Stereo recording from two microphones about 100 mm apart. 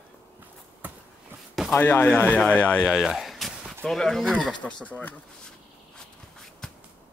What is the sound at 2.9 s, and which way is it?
Speech, 5° right (ahead or behind).